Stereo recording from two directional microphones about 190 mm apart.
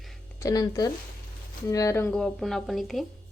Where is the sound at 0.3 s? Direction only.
20° left (ahead or behind); by 3.1 s centre (ahead or behind).